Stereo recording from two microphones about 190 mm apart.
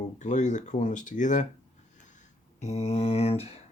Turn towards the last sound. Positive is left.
turn(degrees=35)  # may be behind; listen again after turning